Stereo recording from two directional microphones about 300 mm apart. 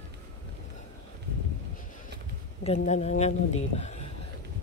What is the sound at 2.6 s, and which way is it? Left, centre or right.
Speech, left.